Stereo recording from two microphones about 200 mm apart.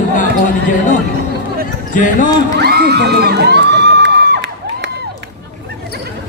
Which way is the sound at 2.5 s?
50° right (ahead or behind).